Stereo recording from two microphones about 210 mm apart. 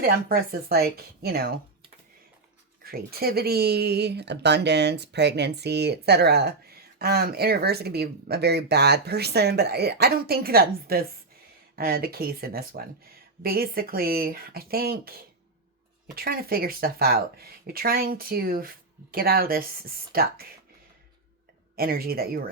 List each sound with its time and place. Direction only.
0.0 s speech: 45° right (ahead or behind)
2.8 s speech: 45° right (ahead or behind)
16.1 s speech: 45° right (ahead or behind)
21.8 s speech: 45° right (ahead or behind)